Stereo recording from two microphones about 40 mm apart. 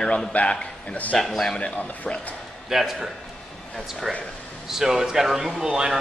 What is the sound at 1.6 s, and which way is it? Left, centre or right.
Speech, left.